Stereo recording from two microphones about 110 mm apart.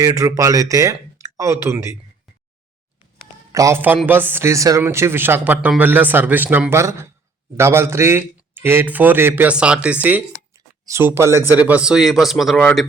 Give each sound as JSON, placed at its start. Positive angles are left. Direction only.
{"t": 0.0, "sound": "a man's voice", "side_deg": -30}
{"t": 3.5, "sound": "a man's voice", "side_deg": -30}
{"t": 3.8, "sound": "a man's voice", "side_deg": -15}
{"t": 10.8, "sound": "a man's voice", "side_deg": -25}